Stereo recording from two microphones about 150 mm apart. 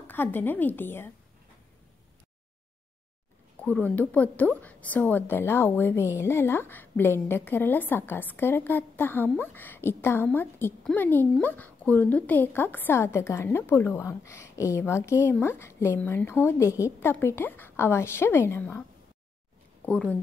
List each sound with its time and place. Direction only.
0.0 s a woman's voice: 15° left (ahead or behind)
3.6 s a woman's voice: 10° left (ahead or behind)
19.9 s a woman's voice: 10° left (ahead or behind)